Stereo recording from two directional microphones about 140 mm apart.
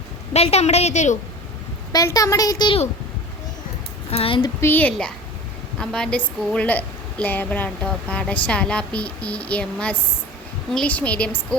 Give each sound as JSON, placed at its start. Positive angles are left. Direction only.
{"t": 0.3, "sound": "a woman's voice", "side_deg": 50}
{"t": 1.9, "sound": "a woman's voice", "side_deg": 25}
{"t": 4.1, "sound": "child singing", "side_deg": 40}
{"t": 4.6, "sound": "a woman's voice", "side_deg": 10}